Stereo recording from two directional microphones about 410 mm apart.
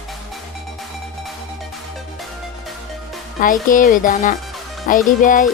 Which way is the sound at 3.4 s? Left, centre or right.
Centre.